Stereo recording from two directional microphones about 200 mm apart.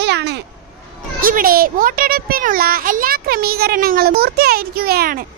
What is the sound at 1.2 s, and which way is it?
A child's voice, 45° right (ahead or behind).